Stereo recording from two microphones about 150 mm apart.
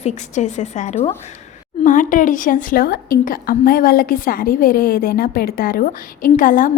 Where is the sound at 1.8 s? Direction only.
60° left (ahead or behind).